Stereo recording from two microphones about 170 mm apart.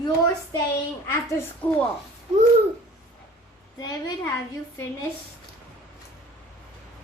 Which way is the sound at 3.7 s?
20° left (ahead or behind).